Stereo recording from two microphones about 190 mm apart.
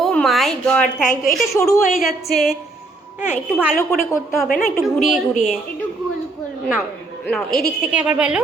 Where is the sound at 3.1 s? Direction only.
5° right (ahead or behind).